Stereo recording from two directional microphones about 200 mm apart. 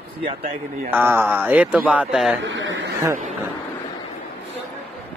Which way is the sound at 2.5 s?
70° right (ahead or behind).